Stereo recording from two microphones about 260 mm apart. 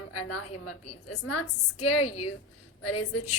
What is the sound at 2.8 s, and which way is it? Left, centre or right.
Speech, left.